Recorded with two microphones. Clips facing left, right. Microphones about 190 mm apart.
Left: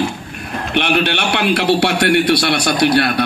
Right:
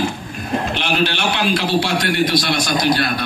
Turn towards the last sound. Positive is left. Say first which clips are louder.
# left 4 dB
turn(degrees=65)  # may be behind; listen again after turning